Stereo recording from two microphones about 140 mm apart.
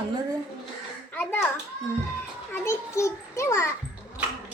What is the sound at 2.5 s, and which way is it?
A child's voice, 20° left (ahead or behind).